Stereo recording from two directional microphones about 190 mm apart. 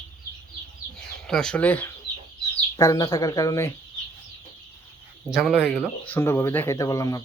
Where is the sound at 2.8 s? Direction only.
20° left (ahead or behind).